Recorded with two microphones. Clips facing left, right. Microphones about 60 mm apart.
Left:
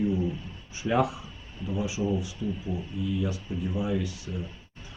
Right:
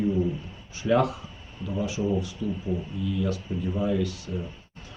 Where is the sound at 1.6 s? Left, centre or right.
Centre.